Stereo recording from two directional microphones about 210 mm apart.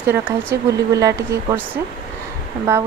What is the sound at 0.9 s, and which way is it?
Speech, 15° right (ahead or behind).